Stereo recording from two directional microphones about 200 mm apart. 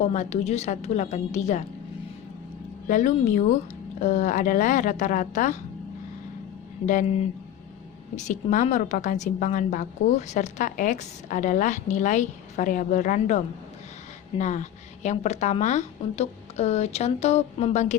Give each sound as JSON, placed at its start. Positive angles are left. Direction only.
{"t": 0.1, "sound": "a woman's voice", "side_deg": 35}
{"t": 2.8, "sound": "a woman's voice", "side_deg": 40}
{"t": 6.8, "sound": "a woman's voice", "side_deg": 40}